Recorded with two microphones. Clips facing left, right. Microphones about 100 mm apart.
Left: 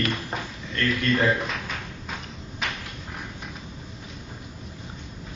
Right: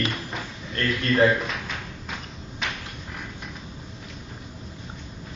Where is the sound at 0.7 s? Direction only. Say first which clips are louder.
Right 1 dB; 30° right (ahead or behind).